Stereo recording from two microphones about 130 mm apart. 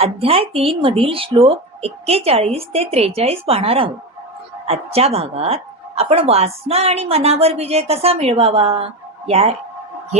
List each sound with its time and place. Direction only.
0.0 s a woman's voice: 45° right (ahead or behind)